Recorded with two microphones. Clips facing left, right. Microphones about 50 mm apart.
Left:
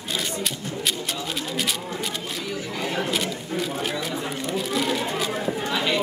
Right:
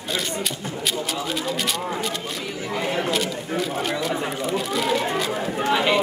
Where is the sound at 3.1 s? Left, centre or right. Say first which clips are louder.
Right 2 dB; centre.